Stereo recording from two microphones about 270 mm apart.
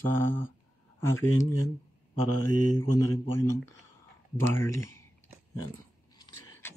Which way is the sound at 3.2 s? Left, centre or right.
Centre.